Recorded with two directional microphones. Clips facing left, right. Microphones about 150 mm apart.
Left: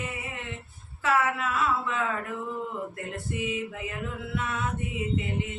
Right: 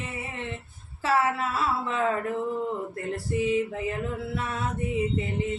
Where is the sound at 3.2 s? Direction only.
35° right (ahead or behind).